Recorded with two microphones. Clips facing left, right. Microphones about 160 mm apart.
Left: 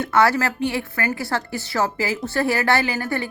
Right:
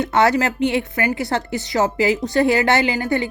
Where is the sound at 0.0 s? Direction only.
20° right (ahead or behind).